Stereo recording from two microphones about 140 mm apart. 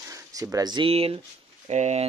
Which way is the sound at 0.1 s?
25° right (ahead or behind).